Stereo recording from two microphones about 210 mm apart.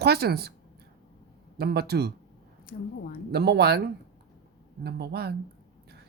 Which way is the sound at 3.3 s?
50° right (ahead or behind).